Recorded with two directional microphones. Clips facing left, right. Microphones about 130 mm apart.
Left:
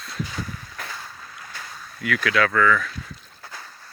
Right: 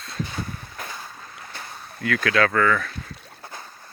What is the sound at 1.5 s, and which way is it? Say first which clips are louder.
Speech: right 2 dB; 25° right (ahead or behind).